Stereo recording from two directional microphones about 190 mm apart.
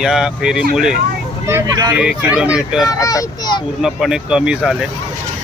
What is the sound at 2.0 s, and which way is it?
Speech, 5° right (ahead or behind).